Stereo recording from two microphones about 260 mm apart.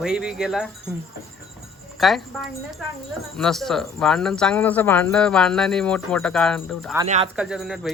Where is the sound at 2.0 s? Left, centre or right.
Centre.